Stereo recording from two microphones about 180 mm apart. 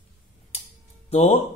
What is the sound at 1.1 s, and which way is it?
Speech, 35° left (ahead or behind).